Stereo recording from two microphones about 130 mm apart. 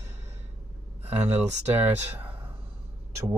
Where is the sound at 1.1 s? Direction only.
60° right (ahead or behind).